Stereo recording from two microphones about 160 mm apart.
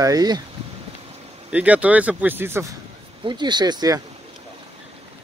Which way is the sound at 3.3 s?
30° right (ahead or behind).